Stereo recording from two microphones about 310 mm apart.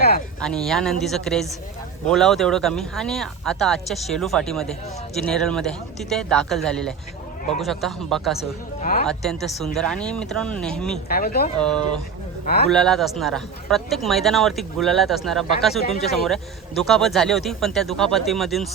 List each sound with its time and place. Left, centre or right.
0.4 s speech: centre
8.8 s speech: left
9.0 s speech: centre
10.9 s speech: left
11.6 s speech: centre